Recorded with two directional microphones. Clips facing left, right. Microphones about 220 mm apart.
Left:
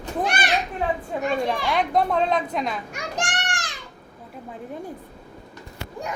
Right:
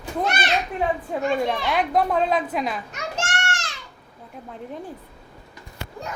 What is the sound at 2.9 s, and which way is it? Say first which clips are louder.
Children playing: even; 15° left (ahead or behind).